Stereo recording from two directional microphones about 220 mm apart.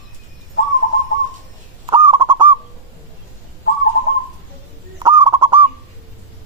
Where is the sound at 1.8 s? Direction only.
20° right (ahead or behind).